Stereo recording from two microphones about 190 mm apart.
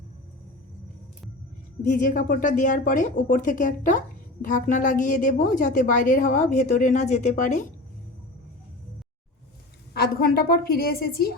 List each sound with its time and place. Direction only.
1.8 s a woman's voice: 45° left (ahead or behind)
9.9 s speech: 55° left (ahead or behind)